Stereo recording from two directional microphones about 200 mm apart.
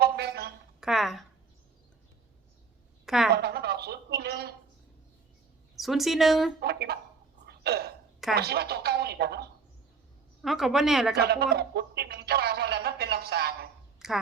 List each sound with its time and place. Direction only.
0.0 s a sound: 50° right (ahead or behind)
0.8 s speech: centre (ahead or behind)
3.3 s a sound: 55° right (ahead or behind)
5.7 s speech: centre (ahead or behind)
6.6 s speech: 55° right (ahead or behind)
7.4 s gasp: 55° right (ahead or behind)
8.4 s speech: 50° right (ahead or behind)
10.4 s speech: centre (ahead or behind)
11.2 s speech: 55° right (ahead or behind)
14.0 s a sound: centre (ahead or behind)